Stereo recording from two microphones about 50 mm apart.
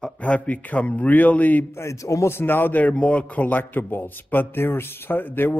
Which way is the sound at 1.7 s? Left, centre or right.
Left.